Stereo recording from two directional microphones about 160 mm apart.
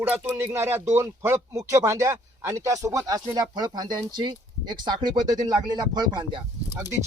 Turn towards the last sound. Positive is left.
turn(degrees=-15)  # may be behind; listen again after turning